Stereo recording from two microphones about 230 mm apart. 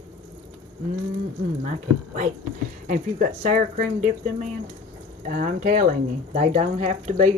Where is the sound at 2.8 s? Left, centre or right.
Right.